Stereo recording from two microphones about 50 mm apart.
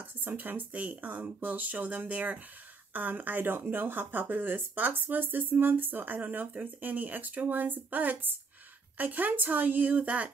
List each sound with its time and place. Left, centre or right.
0.0 s speech: right